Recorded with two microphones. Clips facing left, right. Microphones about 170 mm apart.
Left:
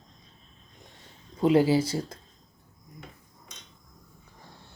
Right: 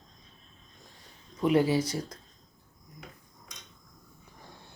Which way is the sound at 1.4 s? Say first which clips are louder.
Left 3 dB; 25° left (ahead or behind).